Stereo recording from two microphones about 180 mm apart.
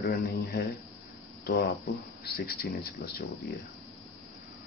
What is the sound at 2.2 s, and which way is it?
Speech, 60° left (ahead or behind).